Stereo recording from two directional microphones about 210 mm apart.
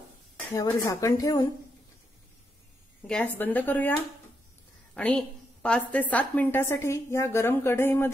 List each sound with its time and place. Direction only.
0.6 s a woman's voice: 15° left (ahead or behind)
3.0 s a woman's voice: 5° left (ahead or behind)
4.9 s a woman's voice: 5° left (ahead or behind)